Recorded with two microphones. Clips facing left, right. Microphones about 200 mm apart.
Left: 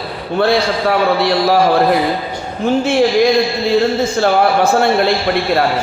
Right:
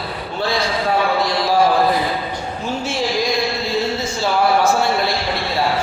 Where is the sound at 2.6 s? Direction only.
60° left (ahead or behind).